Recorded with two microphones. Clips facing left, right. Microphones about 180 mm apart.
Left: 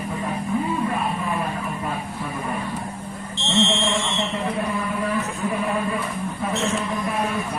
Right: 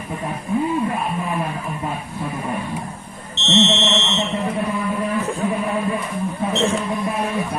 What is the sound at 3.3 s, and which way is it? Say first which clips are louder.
Fire alarm: right 4 dB; 20° right (ahead or behind).